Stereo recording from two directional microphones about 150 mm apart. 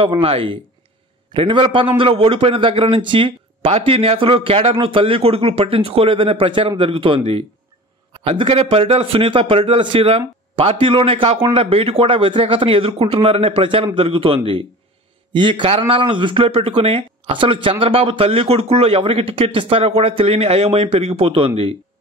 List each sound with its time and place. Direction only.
0.0 s speech: 40° right (ahead or behind)